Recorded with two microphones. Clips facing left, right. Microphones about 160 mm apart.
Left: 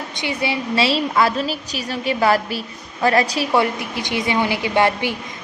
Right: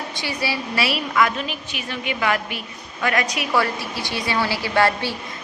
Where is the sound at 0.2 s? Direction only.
20° left (ahead or behind).